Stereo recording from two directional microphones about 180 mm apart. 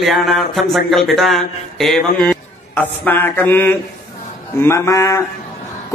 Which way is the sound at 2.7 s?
10° left (ahead or behind).